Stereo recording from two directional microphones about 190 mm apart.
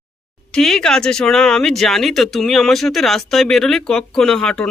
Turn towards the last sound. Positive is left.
turn(degrees=5)  # may be behind; listen again after turning